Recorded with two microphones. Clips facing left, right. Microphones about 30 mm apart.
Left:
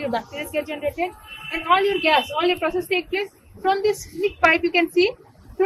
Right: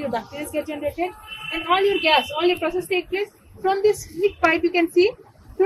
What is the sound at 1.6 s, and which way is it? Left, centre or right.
Speech, centre.